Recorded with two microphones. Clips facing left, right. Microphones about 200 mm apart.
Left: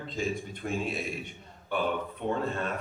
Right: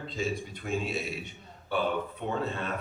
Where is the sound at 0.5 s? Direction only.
50° left (ahead or behind).